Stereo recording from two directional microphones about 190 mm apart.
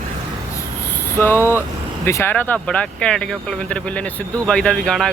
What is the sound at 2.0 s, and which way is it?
Speech, 10° left (ahead or behind).